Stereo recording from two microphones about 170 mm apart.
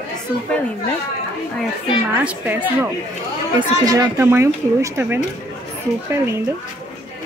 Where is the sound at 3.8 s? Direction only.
20° right (ahead or behind).